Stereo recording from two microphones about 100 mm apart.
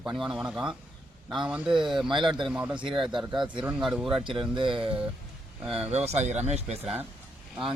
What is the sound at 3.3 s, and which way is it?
Speech, 50° right (ahead or behind).